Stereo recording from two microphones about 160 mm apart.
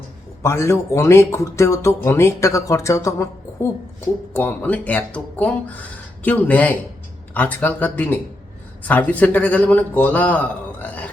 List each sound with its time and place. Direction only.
0.4 s a man's voice: 15° left (ahead or behind)